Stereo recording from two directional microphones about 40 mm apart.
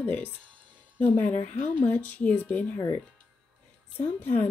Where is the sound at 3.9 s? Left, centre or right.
Left.